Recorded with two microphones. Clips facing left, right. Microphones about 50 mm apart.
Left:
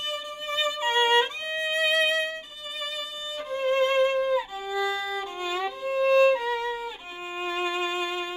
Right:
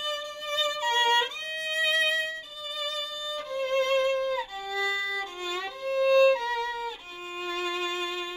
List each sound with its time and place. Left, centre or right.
0.1 s violin: centre
3.5 s violin: centre
7.3 s music: left